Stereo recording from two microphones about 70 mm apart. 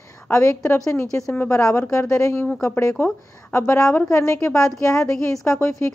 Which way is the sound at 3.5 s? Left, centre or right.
Left.